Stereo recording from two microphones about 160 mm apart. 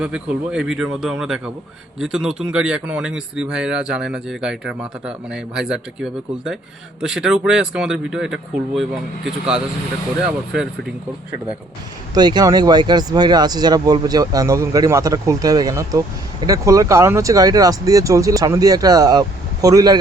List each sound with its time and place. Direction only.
0.0 s speech: 5° right (ahead or behind)
12.1 s speech: 25° right (ahead or behind)